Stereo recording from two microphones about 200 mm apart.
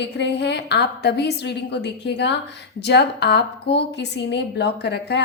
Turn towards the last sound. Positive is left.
turn(degrees=55)  # may be behind; listen again after turning